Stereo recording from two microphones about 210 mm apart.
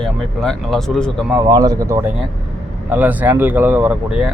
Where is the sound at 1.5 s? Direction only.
15° right (ahead or behind).